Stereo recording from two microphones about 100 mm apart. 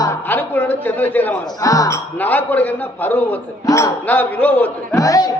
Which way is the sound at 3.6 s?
30° left (ahead or behind).